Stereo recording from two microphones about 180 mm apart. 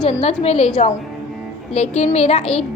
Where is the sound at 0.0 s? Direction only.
35° left (ahead or behind).